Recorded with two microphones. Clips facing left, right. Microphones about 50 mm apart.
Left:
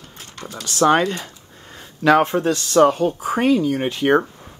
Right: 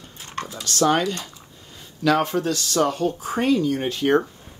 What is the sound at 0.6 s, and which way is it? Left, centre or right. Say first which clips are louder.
Speech: left 4 dB; centre.